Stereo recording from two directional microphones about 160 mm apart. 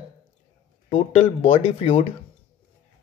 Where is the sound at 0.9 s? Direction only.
35° left (ahead or behind).